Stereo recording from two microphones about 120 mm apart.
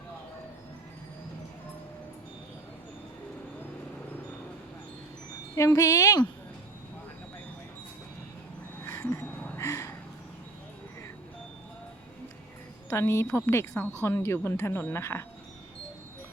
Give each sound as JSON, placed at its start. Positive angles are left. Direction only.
{"t": 5.5, "sound": "speech", "side_deg": 25}
{"t": 8.9, "sound": "a sound", "side_deg": 15}
{"t": 12.9, "sound": "speech", "side_deg": 25}